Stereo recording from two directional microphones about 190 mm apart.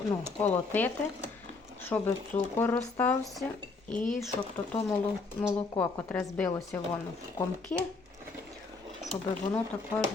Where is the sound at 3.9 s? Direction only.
45° left (ahead or behind).